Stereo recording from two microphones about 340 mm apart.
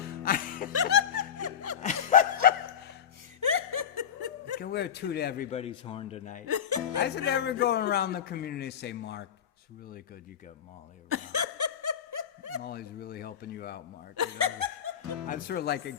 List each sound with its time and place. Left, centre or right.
0.2 s music: left
0.7 s snicker: right
1.8 s a sound: left
3.4 s chuckle: right
3.9 s snicker: right
4.6 s a man's voice: left
6.7 s speech: right
7.0 s a man's voice: left
11.1 s snicker: right
12.6 s a man's voice: left
14.3 s laughter: right
15.3 s a man's voice: left